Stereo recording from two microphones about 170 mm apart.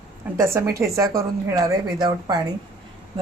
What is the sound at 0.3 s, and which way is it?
A woman's voice, 15° right (ahead or behind).